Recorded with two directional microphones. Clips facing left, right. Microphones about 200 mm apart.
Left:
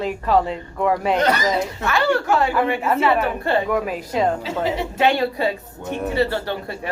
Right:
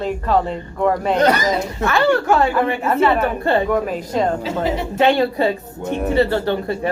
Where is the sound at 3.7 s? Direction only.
5° left (ahead or behind).